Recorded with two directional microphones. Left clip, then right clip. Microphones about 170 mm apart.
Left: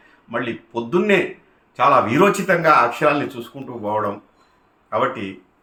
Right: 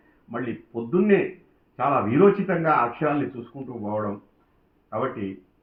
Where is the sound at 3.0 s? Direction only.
45° left (ahead or behind).